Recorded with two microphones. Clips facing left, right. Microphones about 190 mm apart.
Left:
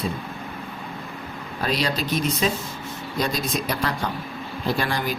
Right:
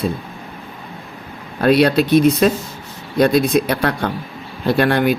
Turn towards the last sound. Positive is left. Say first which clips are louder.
# right 10 dB
turn(degrees=-65)  # may be behind; listen again after turning